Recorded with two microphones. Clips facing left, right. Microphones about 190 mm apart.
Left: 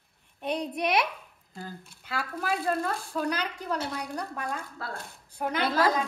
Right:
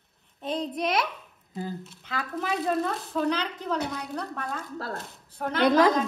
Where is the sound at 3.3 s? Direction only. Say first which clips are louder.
Right 2 dB; 10° left (ahead or behind).